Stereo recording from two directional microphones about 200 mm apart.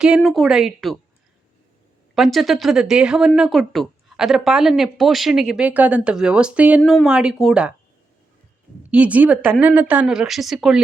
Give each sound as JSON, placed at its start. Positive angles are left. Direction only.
{"t": 0.0, "sound": "speech", "side_deg": 0}
{"t": 2.1, "sound": "speech", "side_deg": 0}
{"t": 8.9, "sound": "speech", "side_deg": -5}